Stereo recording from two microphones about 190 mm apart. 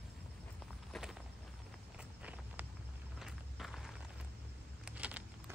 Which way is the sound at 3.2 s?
Centre (ahead or behind).